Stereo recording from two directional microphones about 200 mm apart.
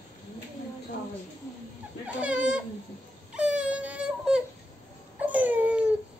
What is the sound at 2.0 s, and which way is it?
Speech, 5° right (ahead or behind).